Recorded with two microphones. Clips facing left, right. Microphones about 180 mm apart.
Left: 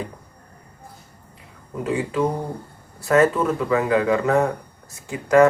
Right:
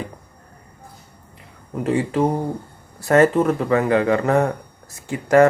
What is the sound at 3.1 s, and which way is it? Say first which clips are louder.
Speech: right 2 dB; 45° right (ahead or behind).